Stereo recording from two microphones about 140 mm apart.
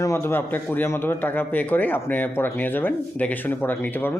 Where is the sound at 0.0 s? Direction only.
20° left (ahead or behind).